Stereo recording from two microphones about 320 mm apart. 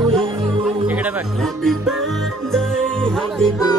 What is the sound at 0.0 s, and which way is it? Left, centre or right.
Music, centre.